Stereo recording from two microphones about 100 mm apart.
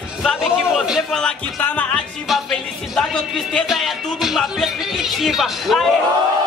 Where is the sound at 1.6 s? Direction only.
15° left (ahead or behind).